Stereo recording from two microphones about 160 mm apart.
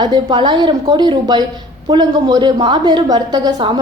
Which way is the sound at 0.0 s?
25° right (ahead or behind).